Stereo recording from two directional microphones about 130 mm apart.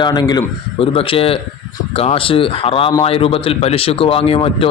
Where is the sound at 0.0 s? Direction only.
30° left (ahead or behind).